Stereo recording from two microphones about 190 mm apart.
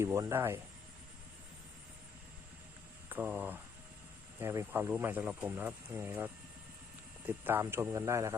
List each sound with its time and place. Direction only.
0.0 s speech: 15° right (ahead or behind)
3.1 s speech: 10° right (ahead or behind)